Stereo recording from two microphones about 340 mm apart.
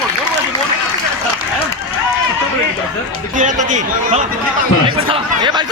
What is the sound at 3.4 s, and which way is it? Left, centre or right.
A man's voice, right.